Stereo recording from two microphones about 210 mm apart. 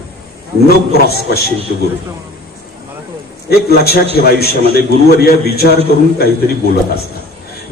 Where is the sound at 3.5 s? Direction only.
50° left (ahead or behind).